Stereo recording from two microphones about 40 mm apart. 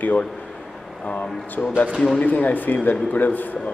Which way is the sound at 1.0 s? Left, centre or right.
Left.